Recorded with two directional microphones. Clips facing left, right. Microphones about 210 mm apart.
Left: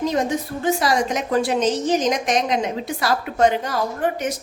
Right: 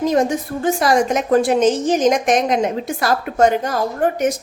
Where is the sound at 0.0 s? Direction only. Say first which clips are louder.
Right 4 dB; 50° right (ahead or behind).